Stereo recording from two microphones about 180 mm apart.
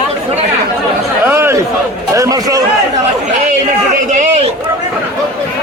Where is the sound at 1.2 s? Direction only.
15° right (ahead or behind).